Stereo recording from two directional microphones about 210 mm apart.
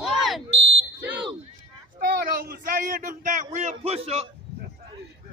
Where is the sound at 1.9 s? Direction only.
45° right (ahead or behind); by 4.3 s 30° right (ahead or behind).